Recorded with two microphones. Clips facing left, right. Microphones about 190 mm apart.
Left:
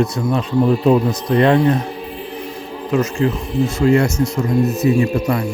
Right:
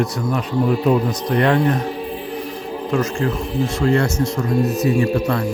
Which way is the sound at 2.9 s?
20° left (ahead or behind).